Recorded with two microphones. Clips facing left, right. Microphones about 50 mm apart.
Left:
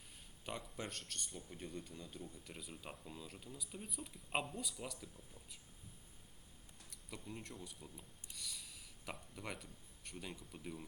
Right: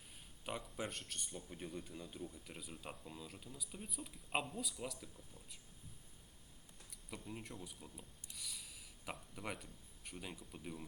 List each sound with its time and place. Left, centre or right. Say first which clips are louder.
0.4 s a sound: right 2 dB; centre
1.4 s speech: right 2 dB; centre
6.9 s speech: right 1 dB; centre